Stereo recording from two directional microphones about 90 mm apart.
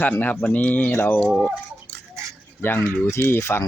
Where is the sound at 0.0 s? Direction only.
20° left (ahead or behind).